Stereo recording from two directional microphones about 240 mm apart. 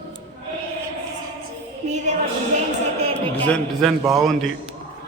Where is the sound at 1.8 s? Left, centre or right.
Right.